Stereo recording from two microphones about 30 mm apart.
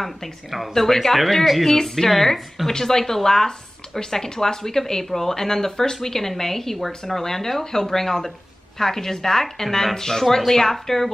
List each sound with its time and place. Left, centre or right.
0.5 s speech: centre
1.7 s speech: centre
2.3 s speech: centre
2.8 s speech: centre